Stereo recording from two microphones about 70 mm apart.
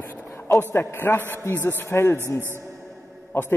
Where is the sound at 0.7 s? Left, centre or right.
Left.